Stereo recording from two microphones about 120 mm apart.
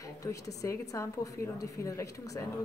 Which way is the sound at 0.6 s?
25° left (ahead or behind).